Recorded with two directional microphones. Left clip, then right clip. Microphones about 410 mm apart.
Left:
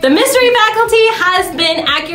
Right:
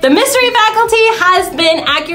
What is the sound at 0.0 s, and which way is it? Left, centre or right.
A woman's voice, centre.